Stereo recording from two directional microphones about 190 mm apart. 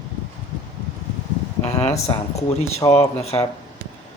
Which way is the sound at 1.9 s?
35° left (ahead or behind).